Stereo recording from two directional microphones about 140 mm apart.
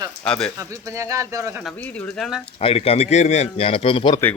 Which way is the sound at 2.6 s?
45° left (ahead or behind).